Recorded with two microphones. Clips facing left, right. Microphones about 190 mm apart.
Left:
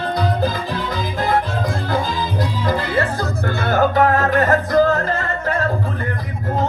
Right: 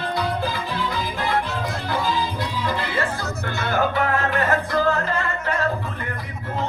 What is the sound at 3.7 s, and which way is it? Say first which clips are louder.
Music: left 6 dB; 40° left (ahead or behind).